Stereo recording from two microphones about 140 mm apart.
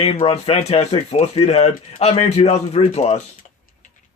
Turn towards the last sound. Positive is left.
turn(degrees=50)  # may be behind; listen again after turning